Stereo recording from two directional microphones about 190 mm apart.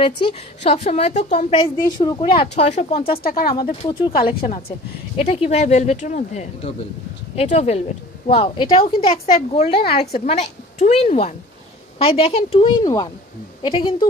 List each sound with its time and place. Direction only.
0.0 s a woman's voice: 30° left (ahead or behind)
3.3 s speech: 50° left (ahead or behind)
4.6 s a woman's voice: 30° left (ahead or behind)